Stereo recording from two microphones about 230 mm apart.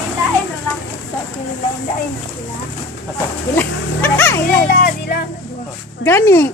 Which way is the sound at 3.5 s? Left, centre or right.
Centre.